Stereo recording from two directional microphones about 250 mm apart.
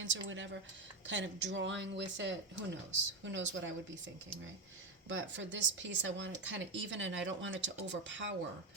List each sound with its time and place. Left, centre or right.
0.0 s speech: right
5.0 s speech: right